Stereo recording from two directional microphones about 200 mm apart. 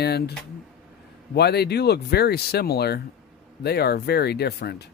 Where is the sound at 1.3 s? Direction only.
55° left (ahead or behind).